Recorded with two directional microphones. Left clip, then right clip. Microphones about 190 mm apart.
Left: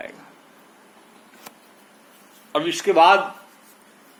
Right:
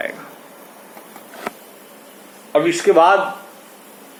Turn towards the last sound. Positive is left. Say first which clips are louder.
# right 2 dB
turn(degrees=30)  # may be behind; listen again after turning